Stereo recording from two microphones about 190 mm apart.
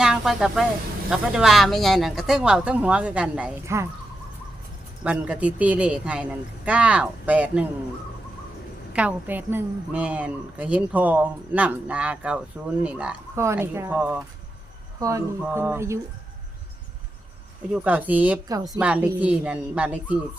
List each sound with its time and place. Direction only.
0.0 s a sound: 5° right (ahead or behind)
1.1 s speech: centre (ahead or behind)
5.0 s a woman's voice: 5° right (ahead or behind)
8.9 s a woman's voice: 5° right (ahead or behind)
17.7 s a woman's voice: 10° right (ahead or behind)
18.4 s a woman's voice: 20° right (ahead or behind)
18.8 s a woman's voice: 5° right (ahead or behind)